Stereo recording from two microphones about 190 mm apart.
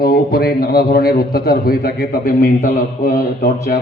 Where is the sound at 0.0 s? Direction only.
55° left (ahead or behind).